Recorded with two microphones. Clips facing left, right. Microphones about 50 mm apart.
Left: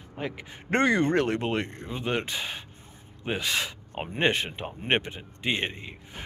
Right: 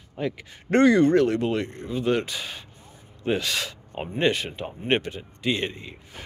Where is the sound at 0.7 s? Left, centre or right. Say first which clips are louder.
Right 6 dB; left.